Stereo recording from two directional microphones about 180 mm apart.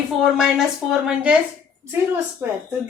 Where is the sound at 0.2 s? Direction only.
Centre (ahead or behind).